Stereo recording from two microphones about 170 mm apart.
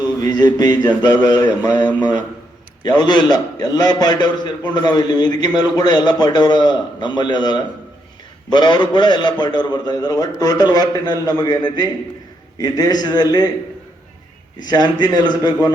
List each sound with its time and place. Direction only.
0.2 s a man's voice: 25° left (ahead or behind)
14.6 s a man's voice: 25° left (ahead or behind)